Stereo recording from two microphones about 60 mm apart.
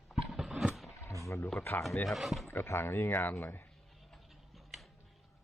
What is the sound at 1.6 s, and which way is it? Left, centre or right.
Speech, left.